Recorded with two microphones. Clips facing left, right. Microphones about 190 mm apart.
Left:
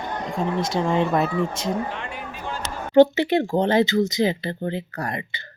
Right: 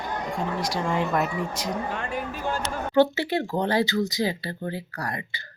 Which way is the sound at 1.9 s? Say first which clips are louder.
Right 3 dB; 45° right (ahead or behind).